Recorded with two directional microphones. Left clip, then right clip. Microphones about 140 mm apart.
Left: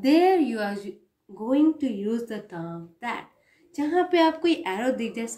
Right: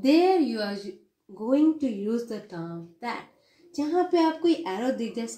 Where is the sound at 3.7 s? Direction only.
15° left (ahead or behind).